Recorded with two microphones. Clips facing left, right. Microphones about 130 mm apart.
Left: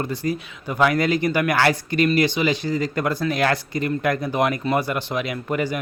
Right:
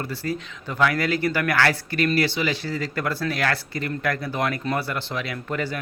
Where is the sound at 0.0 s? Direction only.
20° left (ahead or behind).